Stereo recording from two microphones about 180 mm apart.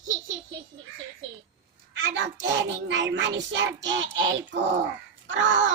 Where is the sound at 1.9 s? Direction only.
90° right.